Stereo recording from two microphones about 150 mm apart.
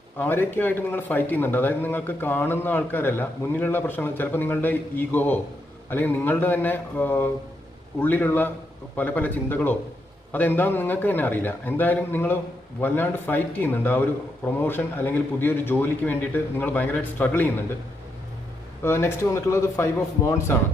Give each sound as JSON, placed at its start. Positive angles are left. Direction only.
{"t": 0.2, "sound": "a man's voice", "side_deg": 15}
{"t": 18.8, "sound": "a man's voice", "side_deg": 15}